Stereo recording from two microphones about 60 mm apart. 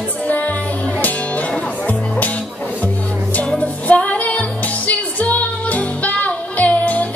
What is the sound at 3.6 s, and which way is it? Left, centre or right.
Music, left.